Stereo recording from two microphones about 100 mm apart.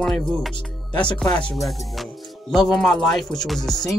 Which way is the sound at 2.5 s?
5° left (ahead or behind).